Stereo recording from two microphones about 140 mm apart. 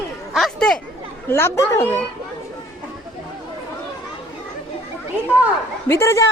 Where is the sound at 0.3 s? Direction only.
Centre (ahead or behind).